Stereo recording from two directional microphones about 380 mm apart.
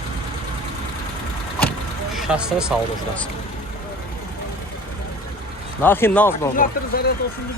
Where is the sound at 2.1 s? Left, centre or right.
Centre.